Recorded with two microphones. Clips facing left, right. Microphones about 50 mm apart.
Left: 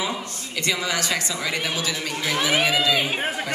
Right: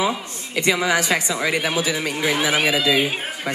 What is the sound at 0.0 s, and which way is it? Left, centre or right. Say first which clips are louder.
A woman's voice: right 5 dB; right.